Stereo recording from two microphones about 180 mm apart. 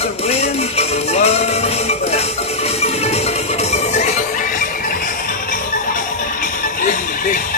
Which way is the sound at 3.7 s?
40° left (ahead or behind).